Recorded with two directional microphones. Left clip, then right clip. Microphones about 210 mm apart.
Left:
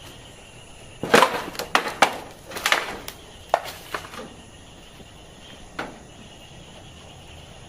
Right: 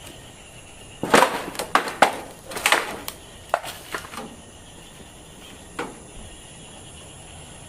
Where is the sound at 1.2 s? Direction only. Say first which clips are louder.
Even; centre (ahead or behind).